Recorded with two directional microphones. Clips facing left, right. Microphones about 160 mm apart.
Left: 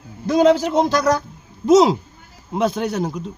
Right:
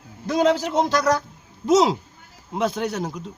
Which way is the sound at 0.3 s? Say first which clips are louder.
Left 5 dB; 20° left (ahead or behind).